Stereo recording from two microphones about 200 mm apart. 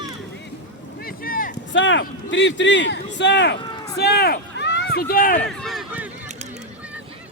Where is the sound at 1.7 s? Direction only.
65° left (ahead or behind); by 5.4 s 45° left (ahead or behind).